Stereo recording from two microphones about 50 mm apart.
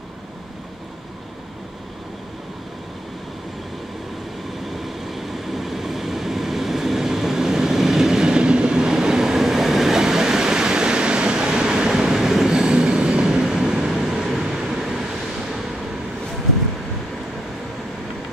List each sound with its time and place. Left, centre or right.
4.7 s train: centre